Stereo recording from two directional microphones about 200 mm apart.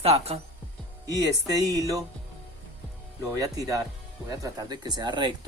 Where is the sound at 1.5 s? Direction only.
15° right (ahead or behind).